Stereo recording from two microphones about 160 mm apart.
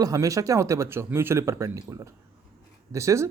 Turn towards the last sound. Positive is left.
turn(degrees=-20)  # may be behind; listen again after turning